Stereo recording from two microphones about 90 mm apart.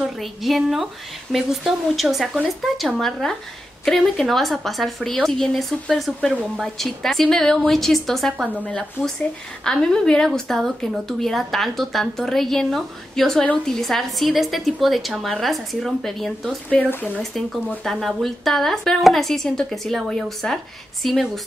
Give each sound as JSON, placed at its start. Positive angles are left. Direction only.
{"t": 0.2, "sound": "a woman's voice", "side_deg": 0}
{"t": 16.6, "sound": "speech", "side_deg": 15}
{"t": 18.0, "sound": "a woman's voice", "side_deg": 0}